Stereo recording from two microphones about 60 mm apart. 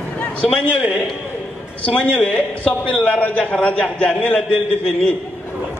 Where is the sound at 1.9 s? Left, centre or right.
Left.